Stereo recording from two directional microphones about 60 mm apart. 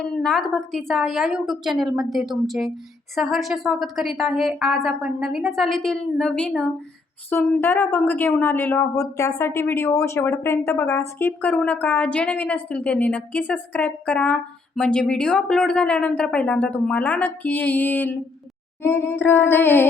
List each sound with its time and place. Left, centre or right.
0.0 s speech: centre
0.9 s a woman's voice: centre
7.6 s speech: left
8.4 s a sound: left
9.0 s speech: left
18.8 s a sound: left